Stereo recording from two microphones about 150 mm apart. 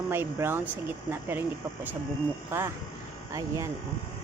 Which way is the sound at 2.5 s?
15° right (ahead or behind).